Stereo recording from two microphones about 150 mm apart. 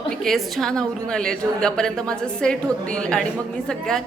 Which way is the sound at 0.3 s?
Centre (ahead or behind).